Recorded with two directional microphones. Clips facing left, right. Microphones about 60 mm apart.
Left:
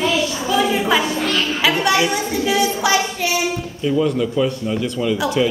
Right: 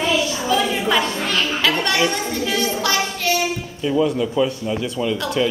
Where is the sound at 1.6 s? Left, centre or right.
Centre.